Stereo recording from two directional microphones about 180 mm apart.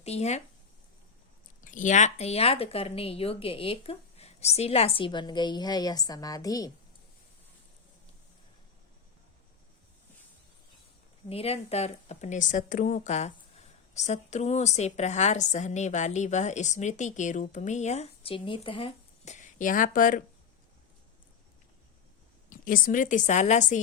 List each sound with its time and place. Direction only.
0.0 s a woman's voice: 35° left (ahead or behind)
1.6 s a woman's voice: 45° left (ahead or behind); by 6.7 s 20° left (ahead or behind)
11.3 s a woman's voice: 35° left (ahead or behind)
22.4 s a woman's voice: 50° left (ahead or behind)